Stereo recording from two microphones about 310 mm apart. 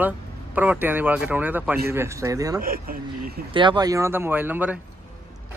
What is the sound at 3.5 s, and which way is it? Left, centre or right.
Speech, centre.